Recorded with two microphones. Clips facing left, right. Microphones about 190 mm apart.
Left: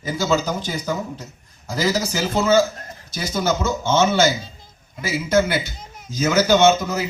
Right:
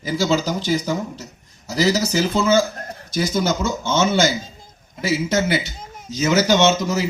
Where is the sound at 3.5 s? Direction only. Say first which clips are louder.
Left 1 dB; 55° left (ahead or behind).